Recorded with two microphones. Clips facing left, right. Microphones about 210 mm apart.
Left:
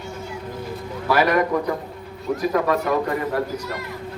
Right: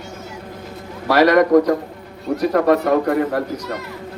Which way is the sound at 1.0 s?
75° right (ahead or behind).